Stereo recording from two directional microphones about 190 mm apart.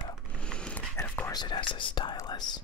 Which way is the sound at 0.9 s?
10° left (ahead or behind).